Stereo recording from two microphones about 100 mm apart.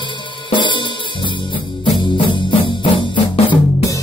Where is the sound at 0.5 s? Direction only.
50° left (ahead or behind).